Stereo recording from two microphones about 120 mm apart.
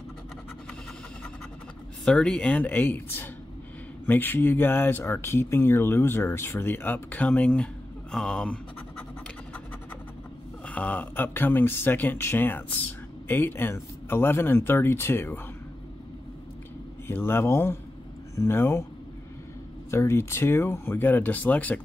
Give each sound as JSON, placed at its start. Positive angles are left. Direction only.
{"t": 2.0, "sound": "speech", "side_deg": 5}
{"t": 10.7, "sound": "speech", "side_deg": 10}
{"t": 17.1, "sound": "speech", "side_deg": 20}
{"t": 19.9, "sound": "speech", "side_deg": 25}